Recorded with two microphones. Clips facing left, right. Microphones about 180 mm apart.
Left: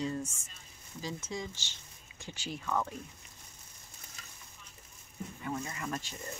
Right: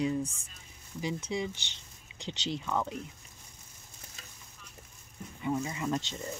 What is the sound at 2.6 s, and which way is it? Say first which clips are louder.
Speech: left 1 dB; 15° right (ahead or behind).